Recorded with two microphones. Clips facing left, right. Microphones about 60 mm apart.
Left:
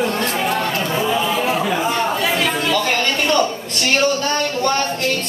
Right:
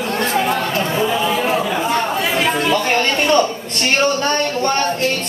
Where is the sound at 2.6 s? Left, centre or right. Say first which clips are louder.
Right 2 dB; right.